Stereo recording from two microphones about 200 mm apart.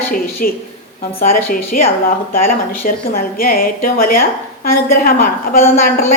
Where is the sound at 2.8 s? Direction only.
45° left (ahead or behind).